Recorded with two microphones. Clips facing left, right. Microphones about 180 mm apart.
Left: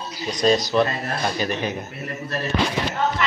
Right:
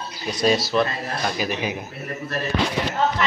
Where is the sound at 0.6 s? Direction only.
Centre (ahead or behind).